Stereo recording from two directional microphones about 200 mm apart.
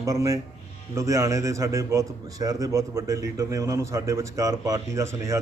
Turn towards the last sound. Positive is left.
turn(degrees=-15)  # may be behind; listen again after turning